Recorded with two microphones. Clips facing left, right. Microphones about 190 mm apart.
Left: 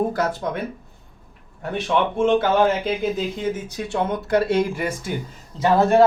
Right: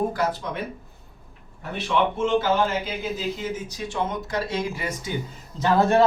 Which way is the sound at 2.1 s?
55° left (ahead or behind).